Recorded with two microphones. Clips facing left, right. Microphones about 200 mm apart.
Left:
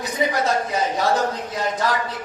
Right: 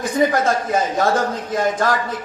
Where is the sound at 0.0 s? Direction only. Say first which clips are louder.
Right 5 dB; 50° right (ahead or behind).